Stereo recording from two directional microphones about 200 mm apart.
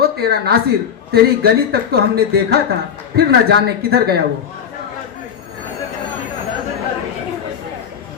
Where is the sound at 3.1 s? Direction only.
55° right (ahead or behind).